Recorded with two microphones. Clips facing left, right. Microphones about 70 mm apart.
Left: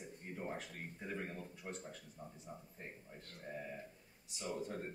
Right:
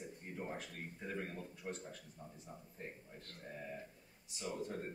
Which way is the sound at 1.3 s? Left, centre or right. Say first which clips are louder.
Right 1 dB; centre.